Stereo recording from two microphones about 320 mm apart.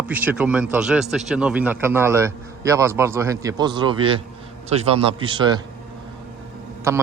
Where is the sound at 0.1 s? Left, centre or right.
Centre.